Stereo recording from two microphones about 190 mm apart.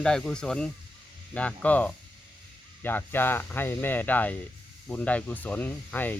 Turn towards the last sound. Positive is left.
turn(degrees=10)  # may be behind; listen again after turning